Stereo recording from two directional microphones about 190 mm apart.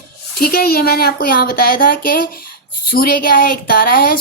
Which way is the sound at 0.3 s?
55° left (ahead or behind).